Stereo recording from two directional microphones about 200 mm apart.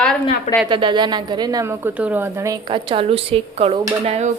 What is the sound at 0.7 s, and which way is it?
A woman's voice, 25° right (ahead or behind).